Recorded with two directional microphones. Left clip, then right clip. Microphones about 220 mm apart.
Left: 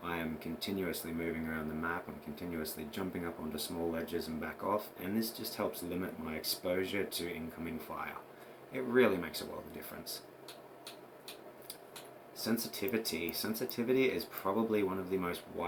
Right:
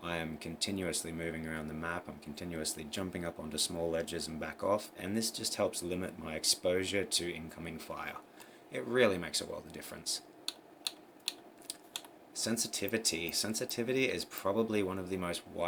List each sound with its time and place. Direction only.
0.0 s speech: 50° right (ahead or behind)
10.0 s a sound: 50° right (ahead or behind)
12.4 s speech: 45° right (ahead or behind)